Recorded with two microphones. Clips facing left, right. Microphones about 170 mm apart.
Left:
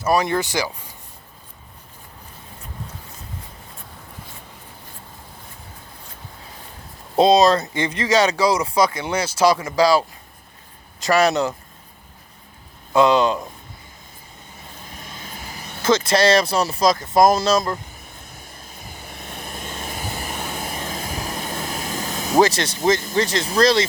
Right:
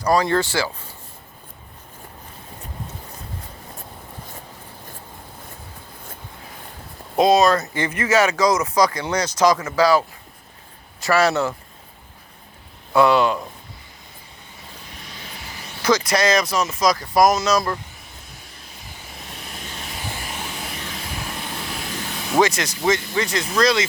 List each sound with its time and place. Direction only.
0.0 s speech: 20° left (ahead or behind)
7.2 s speech: 25° left (ahead or behind)
7.9 s speech: 30° left (ahead or behind)
9.2 s speech: 10° left (ahead or behind)
11.0 s speech: 15° left (ahead or behind)
12.9 s speech: 20° left (ahead or behind)
14.8 s vehicle: 45° left (ahead or behind)
15.8 s speech: 25° left (ahead or behind)
18.3 s vehicle: 50° left (ahead or behind); by 22.8 s 30° left (ahead or behind)
22.9 s speech: 40° left (ahead or behind)